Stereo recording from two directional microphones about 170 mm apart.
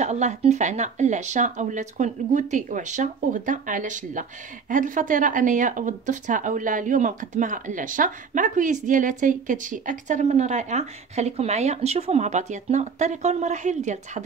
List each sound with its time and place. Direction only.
0.0 s speech: 45° right (ahead or behind)